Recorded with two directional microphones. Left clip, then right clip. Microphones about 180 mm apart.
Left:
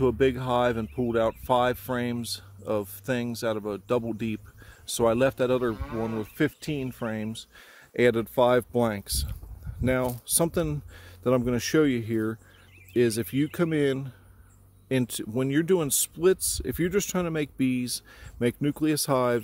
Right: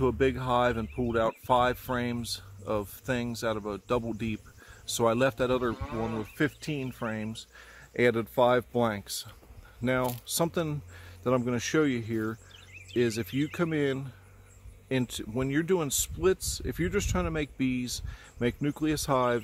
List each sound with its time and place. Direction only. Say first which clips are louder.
0.0 s speech: left 3 dB; 30° left (ahead or behind)
5.8 s speech: left 2 dB; 65° left (ahead or behind)
6.2 s speech: left 3 dB; 35° left (ahead or behind)